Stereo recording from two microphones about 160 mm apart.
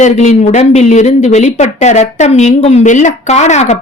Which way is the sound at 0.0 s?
50° left (ahead or behind).